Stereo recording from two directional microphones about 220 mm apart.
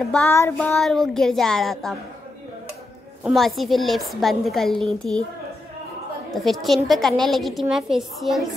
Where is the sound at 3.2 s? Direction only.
Centre (ahead or behind).